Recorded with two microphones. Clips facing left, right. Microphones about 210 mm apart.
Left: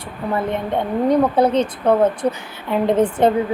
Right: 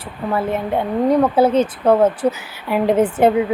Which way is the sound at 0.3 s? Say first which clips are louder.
Right 1 dB; 5° right (ahead or behind).